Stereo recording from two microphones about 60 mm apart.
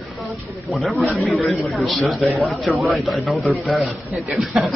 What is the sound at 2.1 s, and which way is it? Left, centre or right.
Speech, centre.